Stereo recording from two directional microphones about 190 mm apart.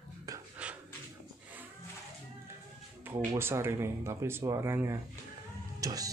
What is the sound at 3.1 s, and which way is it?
Speech, 10° right (ahead or behind).